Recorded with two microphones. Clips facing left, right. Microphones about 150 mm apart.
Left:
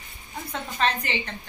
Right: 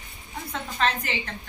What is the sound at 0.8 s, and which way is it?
Speech, centre (ahead or behind).